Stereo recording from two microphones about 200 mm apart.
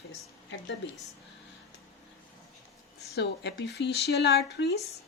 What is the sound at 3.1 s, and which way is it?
Speech, 55° left (ahead or behind).